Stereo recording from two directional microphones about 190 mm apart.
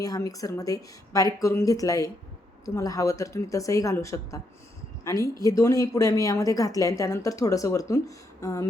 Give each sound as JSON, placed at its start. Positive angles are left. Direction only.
{"t": 0.0, "sound": "a woman's voice", "side_deg": 20}